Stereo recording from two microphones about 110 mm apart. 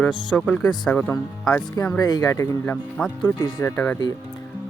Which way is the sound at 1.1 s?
25° left (ahead or behind).